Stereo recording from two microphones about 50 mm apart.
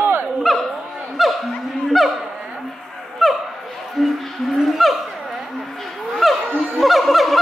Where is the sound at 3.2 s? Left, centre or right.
Centre.